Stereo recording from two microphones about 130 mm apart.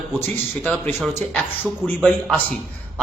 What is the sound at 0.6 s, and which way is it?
A man's voice, 15° left (ahead or behind).